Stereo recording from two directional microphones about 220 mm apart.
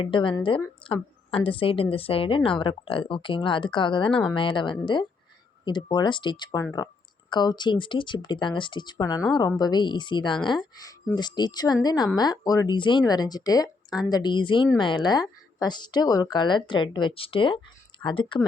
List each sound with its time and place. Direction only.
0.0 s speech: 25° left (ahead or behind)